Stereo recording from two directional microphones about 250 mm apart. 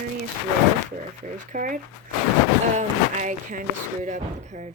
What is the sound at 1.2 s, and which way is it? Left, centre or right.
Speech, right.